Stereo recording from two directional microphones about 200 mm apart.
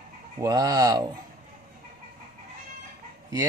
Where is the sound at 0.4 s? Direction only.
20° right (ahead or behind).